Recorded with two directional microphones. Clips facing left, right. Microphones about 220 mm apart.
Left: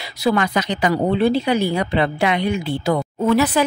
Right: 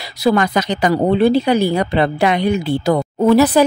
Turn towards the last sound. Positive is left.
turn(degrees=-35)  # may be behind; listen again after turning